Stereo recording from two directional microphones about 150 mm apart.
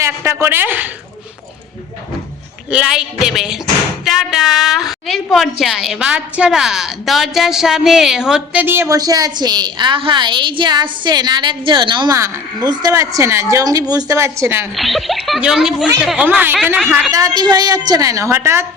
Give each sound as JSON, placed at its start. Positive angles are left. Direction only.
{"t": 0.0, "sound": "a woman's voice", "side_deg": -15}
{"t": 2.6, "sound": "a woman's voice", "side_deg": -5}
{"t": 8.6, "sound": "a woman's voice", "side_deg": -15}
{"t": 14.8, "sound": "a woman's voice", "side_deg": 0}
{"t": 17.1, "sound": "a woman's voice", "side_deg": -25}